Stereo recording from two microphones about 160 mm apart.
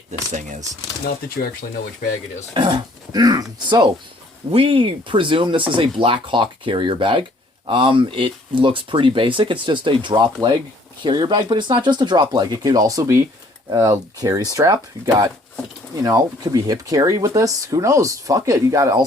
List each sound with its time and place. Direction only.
0.1 s speech: 50° right (ahead or behind)
2.6 s speech: 30° right (ahead or behind)
4.5 s speech: 35° right (ahead or behind); by 19.0 s 20° right (ahead or behind)